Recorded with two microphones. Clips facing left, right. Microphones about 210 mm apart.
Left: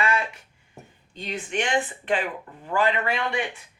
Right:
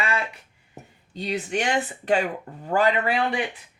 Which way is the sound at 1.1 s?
40° right (ahead or behind).